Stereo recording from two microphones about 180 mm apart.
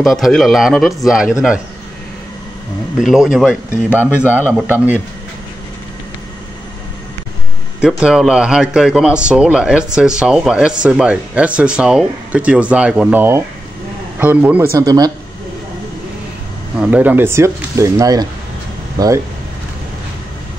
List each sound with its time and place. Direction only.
0.0 s speech: centre (ahead or behind)
3.0 s speech: centre (ahead or behind)
7.8 s speech: 5° right (ahead or behind); by 15.1 s 20° right (ahead or behind)
16.8 s speech: 10° right (ahead or behind)